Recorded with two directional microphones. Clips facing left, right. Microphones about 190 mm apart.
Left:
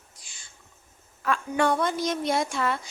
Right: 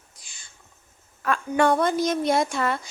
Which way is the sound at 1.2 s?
50° right (ahead or behind).